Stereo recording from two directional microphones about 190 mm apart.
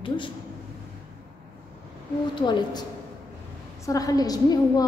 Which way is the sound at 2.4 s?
25° left (ahead or behind).